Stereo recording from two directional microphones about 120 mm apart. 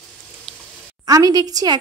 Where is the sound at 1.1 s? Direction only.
30° right (ahead or behind).